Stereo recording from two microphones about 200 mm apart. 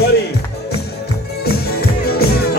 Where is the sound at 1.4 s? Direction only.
50° left (ahead or behind).